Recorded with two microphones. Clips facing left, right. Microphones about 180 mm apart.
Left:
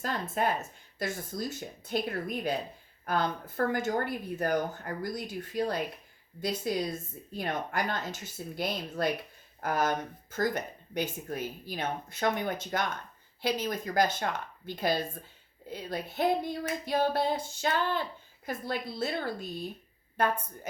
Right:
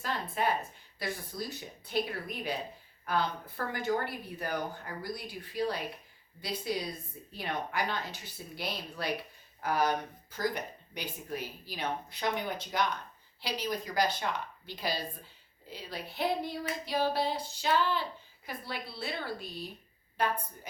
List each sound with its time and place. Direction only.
0.0 s a woman's voice: 45° left (ahead or behind)